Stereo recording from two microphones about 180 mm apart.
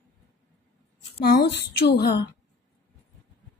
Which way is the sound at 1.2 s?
65° left (ahead or behind).